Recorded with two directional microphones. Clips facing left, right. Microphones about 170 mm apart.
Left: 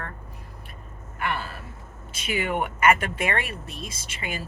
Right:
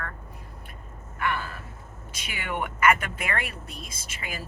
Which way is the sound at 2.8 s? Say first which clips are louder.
Left 2 dB; 25° left (ahead or behind).